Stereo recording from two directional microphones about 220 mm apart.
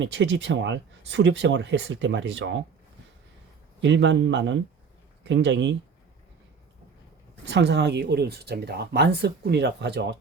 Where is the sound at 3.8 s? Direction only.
55° right (ahead or behind).